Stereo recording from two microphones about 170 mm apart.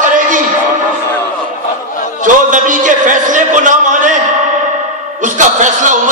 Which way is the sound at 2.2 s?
50° right (ahead or behind).